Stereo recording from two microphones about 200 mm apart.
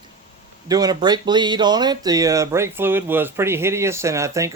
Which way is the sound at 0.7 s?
20° right (ahead or behind).